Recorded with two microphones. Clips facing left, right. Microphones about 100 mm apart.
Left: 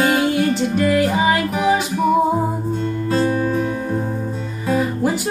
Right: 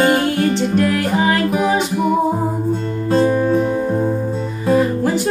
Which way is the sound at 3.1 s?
30° right (ahead or behind).